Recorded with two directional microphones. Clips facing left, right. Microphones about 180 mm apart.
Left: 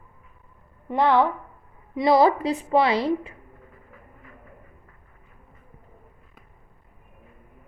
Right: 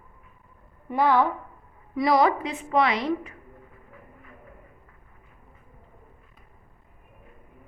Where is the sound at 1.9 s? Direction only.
25° left (ahead or behind).